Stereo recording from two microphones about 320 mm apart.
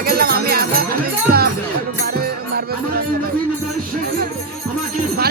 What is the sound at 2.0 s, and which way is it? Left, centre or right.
Music, right.